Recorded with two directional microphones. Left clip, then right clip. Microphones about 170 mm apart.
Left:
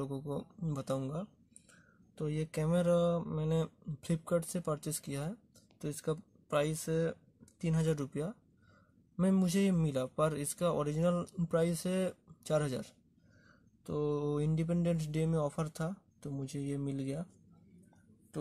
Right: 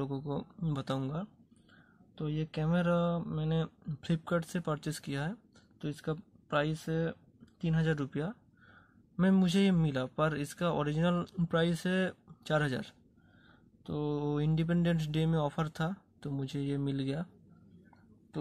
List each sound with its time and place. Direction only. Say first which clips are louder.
0.0 s speech: right 2 dB; 15° left (ahead or behind)
2.1 s speech: even; 25° left (ahead or behind)
5.8 s speech: left 1 dB; 25° left (ahead or behind)
13.8 s speech: left 1 dB; 25° left (ahead or behind); by 17.3 s 10° left (ahead or behind)